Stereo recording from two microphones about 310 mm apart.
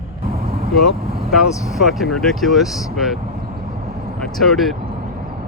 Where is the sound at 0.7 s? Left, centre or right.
Centre.